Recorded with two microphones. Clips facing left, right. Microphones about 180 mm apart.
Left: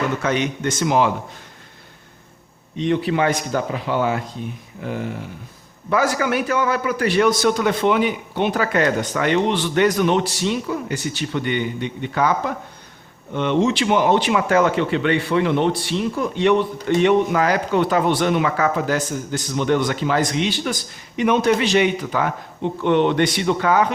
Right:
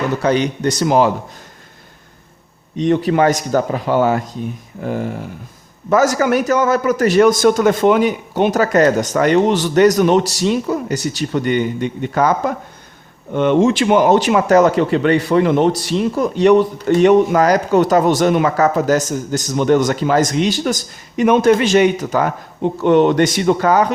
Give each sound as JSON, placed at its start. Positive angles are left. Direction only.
{"t": 0.2, "sound": "speech", "side_deg": -35}
{"t": 2.7, "sound": "speech", "side_deg": -45}